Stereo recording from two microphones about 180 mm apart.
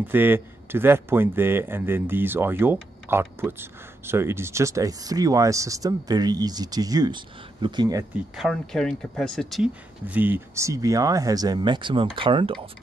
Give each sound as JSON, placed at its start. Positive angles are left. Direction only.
{"t": 0.0, "sound": "speech", "side_deg": -10}
{"t": 8.4, "sound": "speech", "side_deg": 0}